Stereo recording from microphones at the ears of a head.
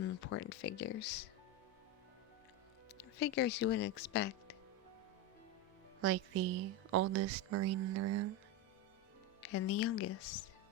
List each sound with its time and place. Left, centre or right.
0.0 s speech: left
3.0 s speech: left
6.0 s speech: right
9.4 s speech: left